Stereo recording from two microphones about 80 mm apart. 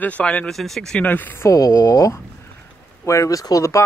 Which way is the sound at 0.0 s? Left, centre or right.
Centre.